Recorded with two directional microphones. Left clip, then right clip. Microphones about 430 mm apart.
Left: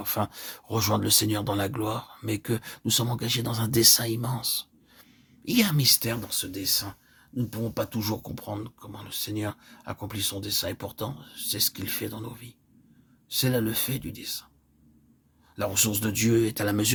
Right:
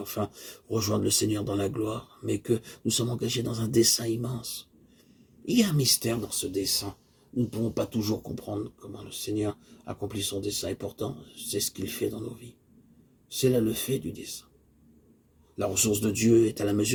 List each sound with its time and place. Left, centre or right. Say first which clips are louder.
0.0 s speech: left 3 dB; left
15.5 s speech: even; left